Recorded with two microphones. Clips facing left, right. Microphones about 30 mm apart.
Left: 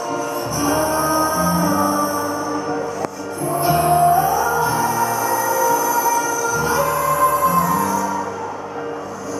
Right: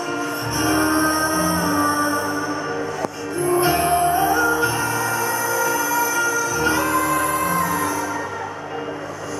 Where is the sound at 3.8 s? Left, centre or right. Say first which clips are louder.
Left 3 dB; centre.